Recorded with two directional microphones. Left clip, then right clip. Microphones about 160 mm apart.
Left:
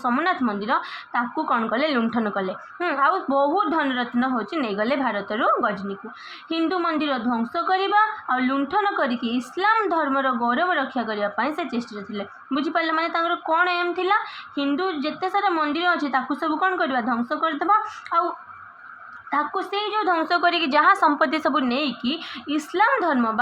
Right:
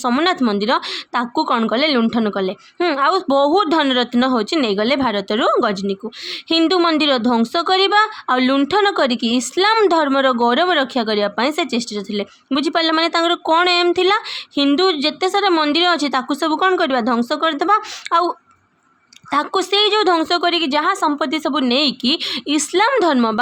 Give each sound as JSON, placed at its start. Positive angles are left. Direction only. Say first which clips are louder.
{"t": 0.0, "sound": "a woman's voice", "louder": "right 5 dB", "side_deg": -60}
{"t": 19.3, "sound": "a woman's voice", "louder": "right 7 dB", "side_deg": -55}